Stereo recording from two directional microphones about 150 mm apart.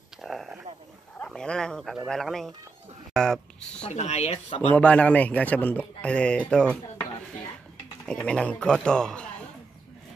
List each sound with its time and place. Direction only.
0.2 s a sound: centre (ahead or behind)
1.2 s speech: 5° left (ahead or behind)
3.9 s speech: 45° left (ahead or behind)
4.7 s speech: 10° left (ahead or behind)
8.0 s speech: 5° left (ahead or behind)